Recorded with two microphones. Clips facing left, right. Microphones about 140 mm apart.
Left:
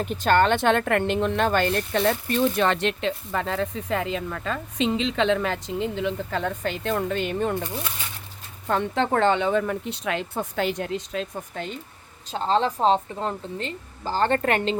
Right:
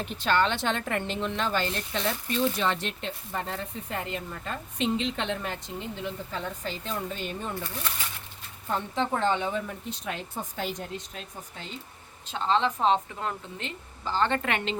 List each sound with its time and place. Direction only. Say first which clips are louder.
0.0 s speech: left 5 dB; 45° left (ahead or behind); by 7.5 s 70° left (ahead or behind)
8.6 s speech: left 5 dB; 75° left (ahead or behind)
12.3 s speech: left 3 dB; 40° left (ahead or behind)